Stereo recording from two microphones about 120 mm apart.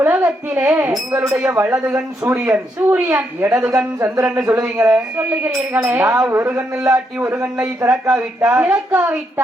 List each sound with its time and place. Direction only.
0.0 s a child's voice: 15° right (ahead or behind)
1.5 s speech: 20° right (ahead or behind)